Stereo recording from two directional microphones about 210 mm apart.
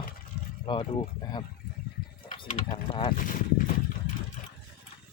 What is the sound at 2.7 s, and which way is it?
Speech, 20° left (ahead or behind).